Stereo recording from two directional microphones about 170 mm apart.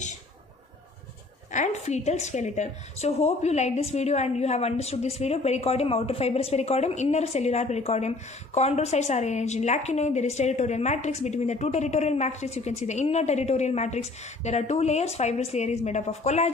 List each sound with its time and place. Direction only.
1.5 s a woman's voice: 45° left (ahead or behind)